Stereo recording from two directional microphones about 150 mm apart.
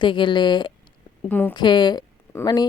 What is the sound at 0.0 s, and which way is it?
Speech, 35° left (ahead or behind).